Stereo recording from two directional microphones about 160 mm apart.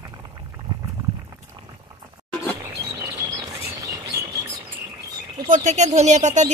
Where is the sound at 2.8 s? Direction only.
20° right (ahead or behind).